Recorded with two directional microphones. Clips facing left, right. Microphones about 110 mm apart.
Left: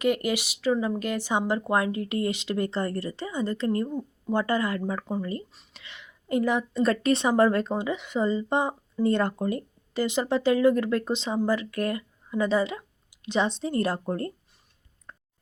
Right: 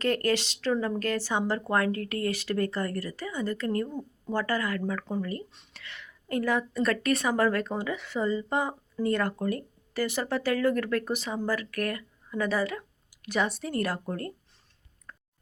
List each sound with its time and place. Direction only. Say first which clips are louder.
0.0 s a woman's voice: left 1 dB; 15° left (ahead or behind)
3.8 s speech: left 5 dB; 10° left (ahead or behind)
4.4 s a woman's voice: left 3 dB; 25° left (ahead or behind)
15.1 s chewing: left 1 dB; 25° left (ahead or behind)